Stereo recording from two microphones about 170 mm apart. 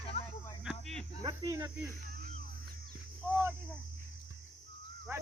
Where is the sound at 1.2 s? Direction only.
20° right (ahead or behind).